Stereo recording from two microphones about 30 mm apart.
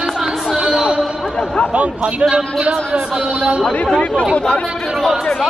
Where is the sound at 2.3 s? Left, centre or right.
Right.